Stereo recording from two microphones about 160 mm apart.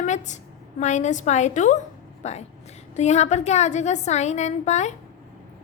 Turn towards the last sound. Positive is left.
turn(degrees=45)  # may be behind; listen again after turning